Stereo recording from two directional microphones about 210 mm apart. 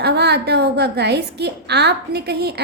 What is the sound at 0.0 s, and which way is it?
A woman's voice, 50° right (ahead or behind).